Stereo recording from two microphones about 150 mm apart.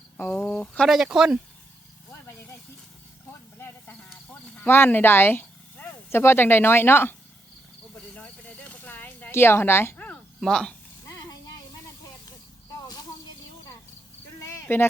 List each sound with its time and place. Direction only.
0.2 s speech: 10° left (ahead or behind); by 1.4 s 5° right (ahead or behind)
4.5 s speech: 15° left (ahead or behind)
8.1 s a sound: 10° left (ahead or behind)
14.4 s cricket: 15° left (ahead or behind)